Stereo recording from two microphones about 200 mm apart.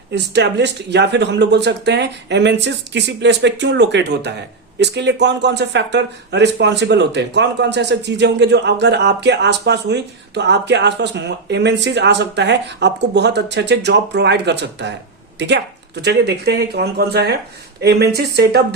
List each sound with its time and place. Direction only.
0.1 s speech: 60° right (ahead or behind)